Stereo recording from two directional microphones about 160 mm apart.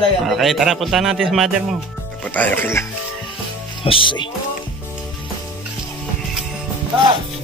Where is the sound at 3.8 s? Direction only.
35° left (ahead or behind).